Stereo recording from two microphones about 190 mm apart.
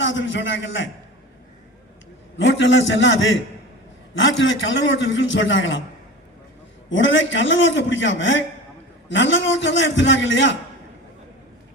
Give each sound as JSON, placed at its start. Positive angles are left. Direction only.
{"t": 0.0, "sound": "a man's voice", "side_deg": 80}
{"t": 2.4, "sound": "a man's voice", "side_deg": 75}
{"t": 6.9, "sound": "a man's voice", "side_deg": 80}